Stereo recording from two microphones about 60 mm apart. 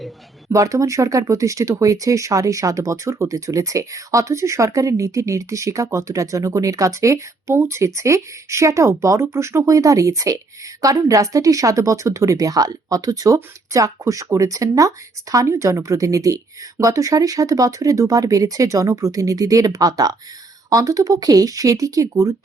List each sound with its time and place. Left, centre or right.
0.5 s speech: right